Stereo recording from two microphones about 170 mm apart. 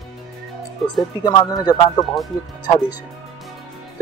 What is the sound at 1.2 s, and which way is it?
Speech, 25° left (ahead or behind).